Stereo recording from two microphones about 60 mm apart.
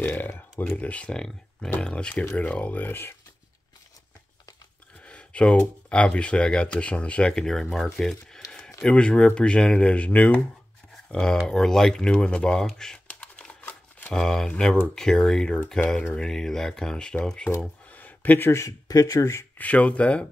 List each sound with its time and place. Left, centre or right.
0.0 s speech: left
5.0 s speech: left
7.7 s a sound: centre
8.8 s speech: centre
11.1 s speech: centre
13.2 s shuffling cards: left
14.1 s speech: centre
17.9 s a sound: left
18.5 s speech: left
19.6 s speech: left